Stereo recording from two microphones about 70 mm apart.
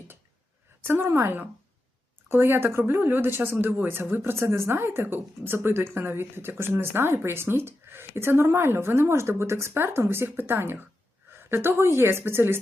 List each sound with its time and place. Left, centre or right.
0.8 s speech: right